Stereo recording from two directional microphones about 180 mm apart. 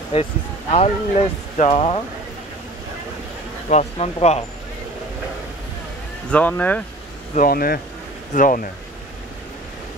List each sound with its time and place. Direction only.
0.1 s speech: 35° left (ahead or behind)
3.6 s speech: 40° left (ahead or behind)
6.3 s speech: 10° left (ahead or behind)
7.3 s speech: 55° left (ahead or behind)